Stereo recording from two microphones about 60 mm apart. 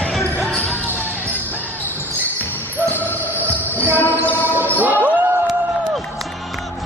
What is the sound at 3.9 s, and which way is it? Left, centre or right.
Music, left.